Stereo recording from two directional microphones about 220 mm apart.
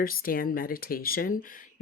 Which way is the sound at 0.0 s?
40° left (ahead or behind).